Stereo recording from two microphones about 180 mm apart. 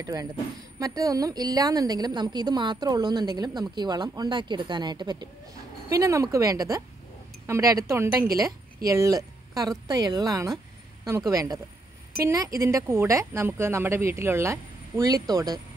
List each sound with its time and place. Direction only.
0.0 s a woman's voice: 20° right (ahead or behind)